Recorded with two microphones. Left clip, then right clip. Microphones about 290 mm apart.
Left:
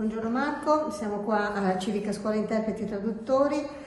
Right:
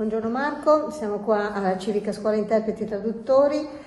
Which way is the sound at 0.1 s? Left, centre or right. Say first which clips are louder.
Right 4 dB; centre.